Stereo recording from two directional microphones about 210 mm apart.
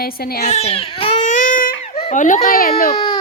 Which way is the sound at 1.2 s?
35° left (ahead or behind).